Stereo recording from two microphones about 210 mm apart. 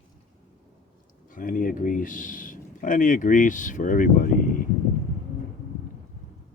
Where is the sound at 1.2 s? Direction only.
40° left (ahead or behind).